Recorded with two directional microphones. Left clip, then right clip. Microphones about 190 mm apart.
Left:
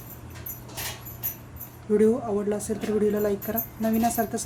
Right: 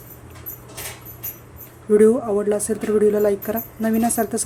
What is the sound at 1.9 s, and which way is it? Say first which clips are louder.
A woman's voice: right 7 dB; 30° right (ahead or behind).